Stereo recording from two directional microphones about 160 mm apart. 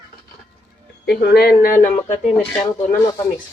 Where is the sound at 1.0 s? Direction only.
90° left; by 1.9 s 60° left (ahead or behind).